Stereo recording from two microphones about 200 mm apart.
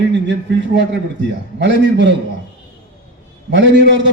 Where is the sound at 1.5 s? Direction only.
60° right (ahead or behind).